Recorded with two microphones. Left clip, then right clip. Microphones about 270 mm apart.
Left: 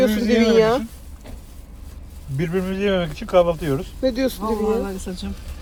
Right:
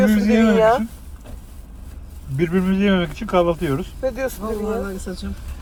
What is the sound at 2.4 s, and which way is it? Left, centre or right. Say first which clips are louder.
Speech: right 2 dB; right.